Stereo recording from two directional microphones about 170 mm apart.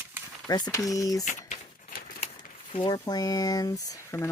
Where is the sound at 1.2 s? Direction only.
50° left (ahead or behind).